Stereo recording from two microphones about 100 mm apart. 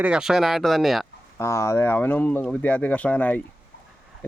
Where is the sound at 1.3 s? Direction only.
30° left (ahead or behind).